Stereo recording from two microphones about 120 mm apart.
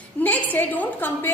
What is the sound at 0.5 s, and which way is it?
Speech, 15° left (ahead or behind).